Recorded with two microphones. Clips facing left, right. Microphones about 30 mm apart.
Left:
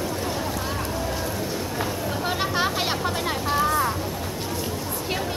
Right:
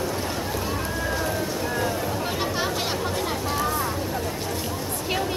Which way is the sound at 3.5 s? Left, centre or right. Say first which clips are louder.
Left 6 dB; centre.